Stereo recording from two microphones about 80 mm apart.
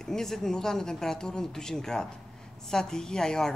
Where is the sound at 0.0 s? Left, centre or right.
Centre.